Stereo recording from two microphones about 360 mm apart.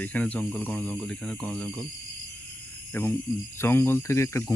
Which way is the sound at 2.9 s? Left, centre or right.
Centre.